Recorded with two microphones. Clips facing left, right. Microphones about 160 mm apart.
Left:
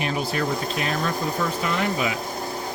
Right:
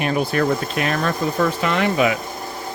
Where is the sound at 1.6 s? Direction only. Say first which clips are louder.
Right 6 dB; 90° right.